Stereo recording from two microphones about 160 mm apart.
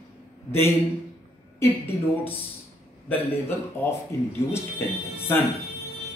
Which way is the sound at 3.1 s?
15° left (ahead or behind).